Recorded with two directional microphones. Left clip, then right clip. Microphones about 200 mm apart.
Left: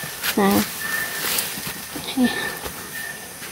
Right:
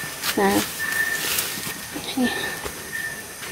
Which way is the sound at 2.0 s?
20° left (ahead or behind).